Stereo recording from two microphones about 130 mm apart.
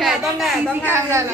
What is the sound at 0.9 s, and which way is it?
Speech, 20° right (ahead or behind).